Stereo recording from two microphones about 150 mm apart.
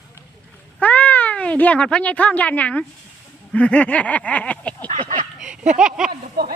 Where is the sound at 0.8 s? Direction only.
10° left (ahead or behind).